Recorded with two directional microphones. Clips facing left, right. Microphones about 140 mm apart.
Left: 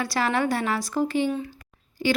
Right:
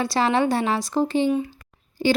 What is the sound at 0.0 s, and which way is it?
Speech, 25° right (ahead or behind).